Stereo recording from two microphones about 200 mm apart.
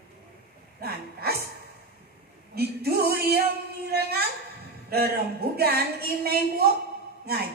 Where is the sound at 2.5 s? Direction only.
50° right (ahead or behind).